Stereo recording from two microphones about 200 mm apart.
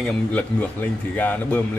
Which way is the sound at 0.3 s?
10° left (ahead or behind).